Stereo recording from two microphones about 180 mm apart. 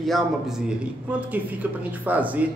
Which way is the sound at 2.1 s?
10° right (ahead or behind).